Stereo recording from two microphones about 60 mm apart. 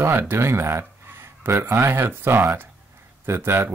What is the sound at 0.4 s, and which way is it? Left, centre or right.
Speech, right.